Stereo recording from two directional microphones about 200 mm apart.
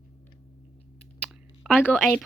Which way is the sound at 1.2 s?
5° right (ahead or behind).